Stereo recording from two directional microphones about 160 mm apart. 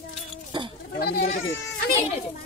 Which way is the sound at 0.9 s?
75° left (ahead or behind).